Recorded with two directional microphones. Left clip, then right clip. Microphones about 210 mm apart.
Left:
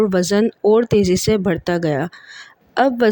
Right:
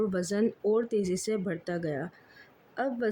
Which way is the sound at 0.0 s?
40° left (ahead or behind).